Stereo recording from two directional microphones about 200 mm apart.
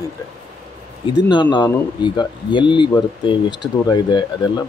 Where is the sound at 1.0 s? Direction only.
20° left (ahead or behind).